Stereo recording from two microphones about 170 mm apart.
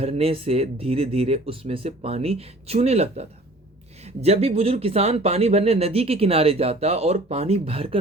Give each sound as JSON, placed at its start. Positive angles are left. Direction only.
{"t": 0.0, "sound": "speech", "side_deg": -35}